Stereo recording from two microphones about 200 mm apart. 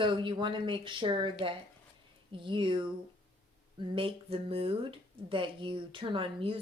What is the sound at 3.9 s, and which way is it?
A woman's voice, 30° right (ahead or behind).